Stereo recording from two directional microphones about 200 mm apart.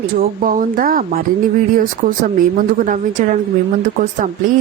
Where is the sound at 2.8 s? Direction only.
40° right (ahead or behind).